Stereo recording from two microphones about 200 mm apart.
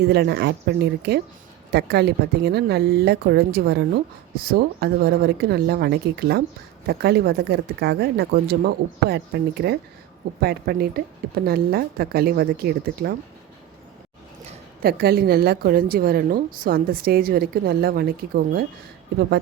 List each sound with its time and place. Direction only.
0.0 s a woman's voice: 55° right (ahead or behind)
14.8 s a woman's voice: 50° right (ahead or behind)